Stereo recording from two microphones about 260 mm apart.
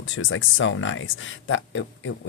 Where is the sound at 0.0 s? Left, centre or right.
Left.